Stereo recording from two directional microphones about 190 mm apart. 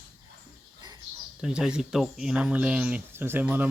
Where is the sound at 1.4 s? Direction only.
5° right (ahead or behind).